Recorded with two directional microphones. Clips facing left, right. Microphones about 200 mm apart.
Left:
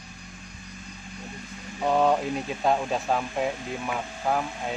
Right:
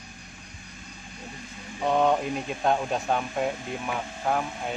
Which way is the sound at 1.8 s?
5° left (ahead or behind).